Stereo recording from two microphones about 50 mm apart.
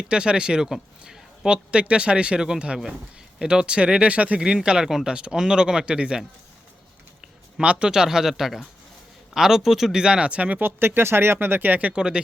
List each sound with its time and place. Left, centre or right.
0.0 s a man's voice: centre
4.4 s speech: centre
7.6 s speech: right
10.6 s speech: right
11.9 s a man's voice: centre